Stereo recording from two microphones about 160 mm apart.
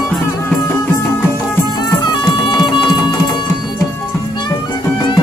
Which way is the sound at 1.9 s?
25° left (ahead or behind).